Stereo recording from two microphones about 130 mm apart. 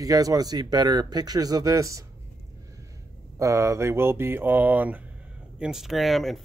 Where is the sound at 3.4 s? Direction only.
25° right (ahead or behind); by 6.3 s centre (ahead or behind).